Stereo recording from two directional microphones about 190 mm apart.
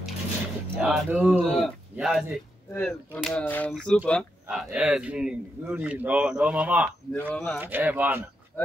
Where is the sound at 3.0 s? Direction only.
5° right (ahead or behind).